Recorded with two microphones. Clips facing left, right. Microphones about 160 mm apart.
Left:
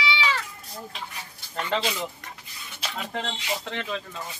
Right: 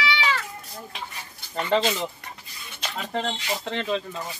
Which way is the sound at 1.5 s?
15° right (ahead or behind).